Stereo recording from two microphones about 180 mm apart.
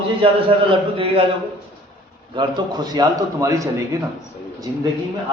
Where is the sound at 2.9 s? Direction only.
20° right (ahead or behind).